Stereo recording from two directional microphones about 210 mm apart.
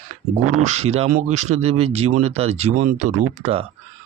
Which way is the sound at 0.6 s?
30° right (ahead or behind).